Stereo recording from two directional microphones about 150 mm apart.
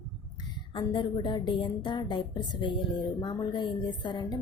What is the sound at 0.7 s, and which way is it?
A woman's voice, 35° left (ahead or behind).